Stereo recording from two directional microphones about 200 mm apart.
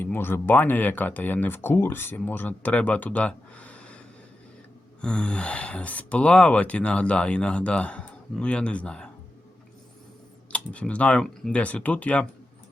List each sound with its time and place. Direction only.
0.0 s speech: 10° left (ahead or behind)
10.5 s speech: 5° left (ahead or behind)